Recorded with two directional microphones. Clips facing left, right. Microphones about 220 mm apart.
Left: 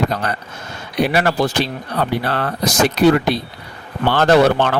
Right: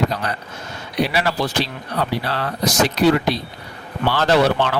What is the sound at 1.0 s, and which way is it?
Speech, 55° left (ahead or behind).